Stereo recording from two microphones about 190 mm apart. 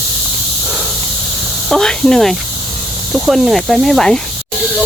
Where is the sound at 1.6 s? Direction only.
5° left (ahead or behind).